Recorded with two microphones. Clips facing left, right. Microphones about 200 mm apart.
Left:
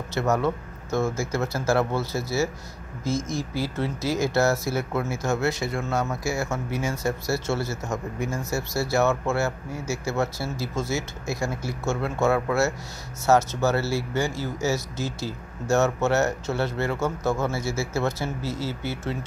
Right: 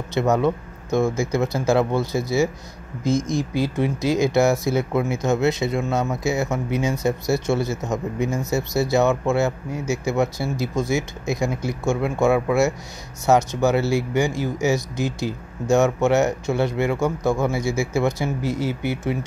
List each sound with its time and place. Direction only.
0.1 s speech: 15° right (ahead or behind)